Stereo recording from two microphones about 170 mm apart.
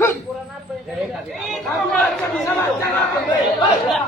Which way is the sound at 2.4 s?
15° left (ahead or behind).